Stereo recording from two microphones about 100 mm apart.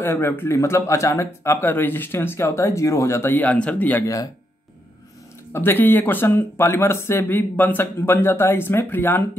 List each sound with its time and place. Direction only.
0.0 s speech: 25° left (ahead or behind)
5.5 s speech: 20° left (ahead or behind)